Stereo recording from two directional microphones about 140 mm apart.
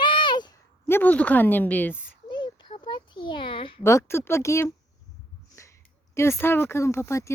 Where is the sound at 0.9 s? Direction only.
15° left (ahead or behind).